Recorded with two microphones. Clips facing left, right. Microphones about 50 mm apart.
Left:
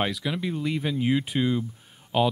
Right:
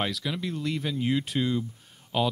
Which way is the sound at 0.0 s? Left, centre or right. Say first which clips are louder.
Left 3 dB; centre.